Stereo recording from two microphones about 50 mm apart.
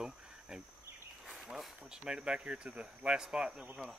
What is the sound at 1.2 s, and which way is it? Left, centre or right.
Insect, centre.